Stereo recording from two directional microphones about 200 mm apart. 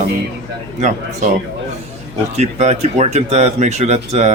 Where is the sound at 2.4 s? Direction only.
35° right (ahead or behind).